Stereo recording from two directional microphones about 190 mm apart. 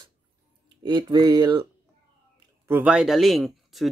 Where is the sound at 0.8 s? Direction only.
20° right (ahead or behind).